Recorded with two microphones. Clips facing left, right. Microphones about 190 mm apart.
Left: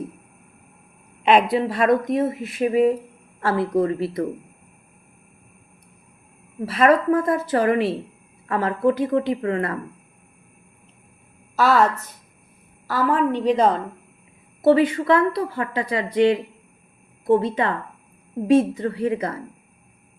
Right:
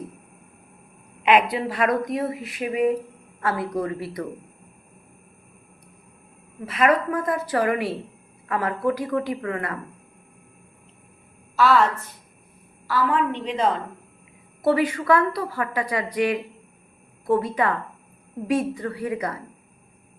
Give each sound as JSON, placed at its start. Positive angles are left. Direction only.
{"t": 1.2, "sound": "a woman's voice", "side_deg": 35}
{"t": 1.5, "sound": "a woman's voice", "side_deg": 25}
{"t": 6.7, "sound": "a woman's voice", "side_deg": 30}
{"t": 11.5, "sound": "a woman's voice", "side_deg": 45}
{"t": 12.9, "sound": "a woman's voice", "side_deg": 40}
{"t": 14.6, "sound": "a woman's voice", "side_deg": 25}